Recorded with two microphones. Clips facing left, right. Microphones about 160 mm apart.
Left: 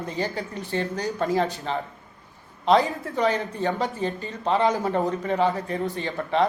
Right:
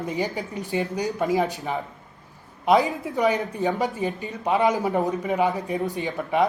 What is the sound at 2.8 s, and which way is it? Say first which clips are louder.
Speech: right 1 dB; 15° right (ahead or behind).